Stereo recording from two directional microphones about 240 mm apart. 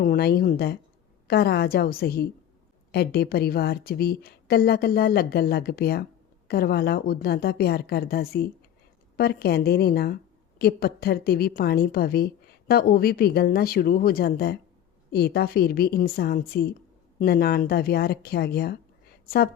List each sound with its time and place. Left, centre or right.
0.0 s a woman's voice: left